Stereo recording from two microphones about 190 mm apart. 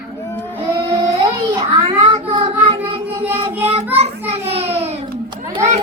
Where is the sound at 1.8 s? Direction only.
25° right (ahead or behind).